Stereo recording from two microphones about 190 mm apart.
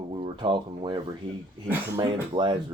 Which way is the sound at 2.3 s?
25° right (ahead or behind).